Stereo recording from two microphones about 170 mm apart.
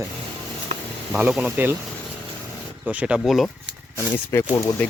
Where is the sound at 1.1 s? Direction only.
5° right (ahead or behind).